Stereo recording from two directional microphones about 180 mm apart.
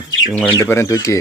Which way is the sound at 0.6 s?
15° left (ahead or behind).